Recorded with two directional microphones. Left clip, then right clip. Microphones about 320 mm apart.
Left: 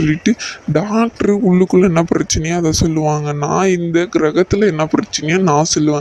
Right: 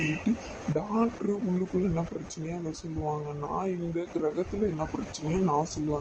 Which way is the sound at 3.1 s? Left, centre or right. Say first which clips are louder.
Left 16 dB; left.